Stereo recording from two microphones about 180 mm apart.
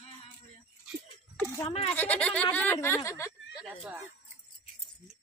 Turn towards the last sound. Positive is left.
turn(degrees=0)  # may be behind; listen again after turning